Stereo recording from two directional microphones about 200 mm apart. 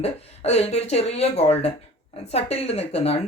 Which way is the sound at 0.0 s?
30° left (ahead or behind).